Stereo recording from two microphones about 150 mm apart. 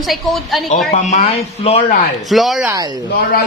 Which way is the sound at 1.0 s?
50° left (ahead or behind).